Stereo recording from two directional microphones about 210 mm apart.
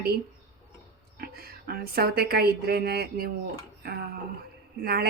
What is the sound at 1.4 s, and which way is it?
A woman's voice, 45° right (ahead or behind).